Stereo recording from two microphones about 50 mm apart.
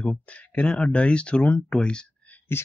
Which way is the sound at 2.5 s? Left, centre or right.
Left.